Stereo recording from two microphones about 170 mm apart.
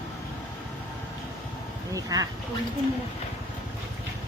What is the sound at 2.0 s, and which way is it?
Speech, 20° right (ahead or behind).